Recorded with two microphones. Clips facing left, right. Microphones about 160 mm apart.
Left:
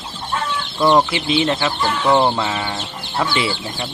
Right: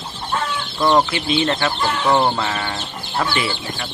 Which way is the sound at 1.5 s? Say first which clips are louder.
Even; 5° left (ahead or behind).